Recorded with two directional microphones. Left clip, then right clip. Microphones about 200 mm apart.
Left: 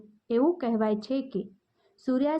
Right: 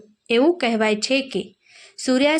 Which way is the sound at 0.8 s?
20° right (ahead or behind).